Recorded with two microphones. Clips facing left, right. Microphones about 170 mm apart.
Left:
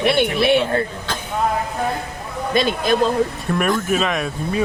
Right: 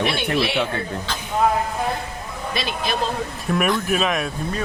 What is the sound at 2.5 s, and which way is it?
Speech, 50° left (ahead or behind).